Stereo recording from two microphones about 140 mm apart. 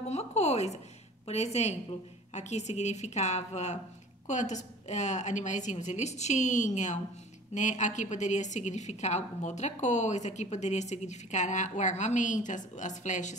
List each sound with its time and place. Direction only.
0.1 s a woman's voice: 50° left (ahead or behind)